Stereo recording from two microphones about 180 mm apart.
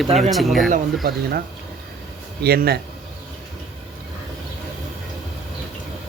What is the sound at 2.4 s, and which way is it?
Speech, 60° right (ahead or behind).